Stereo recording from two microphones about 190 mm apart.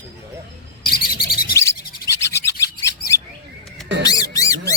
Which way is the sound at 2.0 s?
15° left (ahead or behind).